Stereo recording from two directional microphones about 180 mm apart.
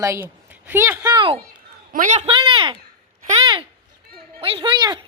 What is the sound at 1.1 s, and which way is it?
Speech, 25° right (ahead or behind).